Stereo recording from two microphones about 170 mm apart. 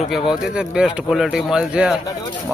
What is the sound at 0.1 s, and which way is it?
Speech, 5° right (ahead or behind).